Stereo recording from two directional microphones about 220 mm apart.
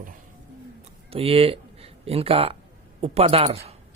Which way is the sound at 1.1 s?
25° right (ahead or behind).